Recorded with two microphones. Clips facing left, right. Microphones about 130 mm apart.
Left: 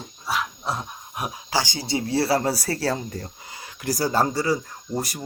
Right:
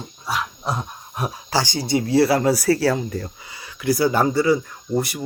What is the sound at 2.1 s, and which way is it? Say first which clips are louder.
Speech: right 5 dB; 30° left (ahead or behind).